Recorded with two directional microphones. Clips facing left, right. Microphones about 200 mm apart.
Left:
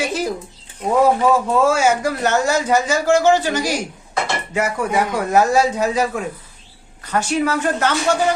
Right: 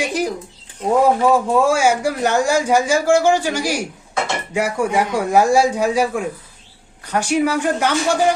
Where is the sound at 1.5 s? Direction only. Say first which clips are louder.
Even; 10° right (ahead or behind).